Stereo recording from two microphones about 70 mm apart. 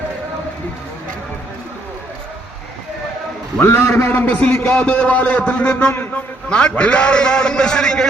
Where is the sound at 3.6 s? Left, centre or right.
Left.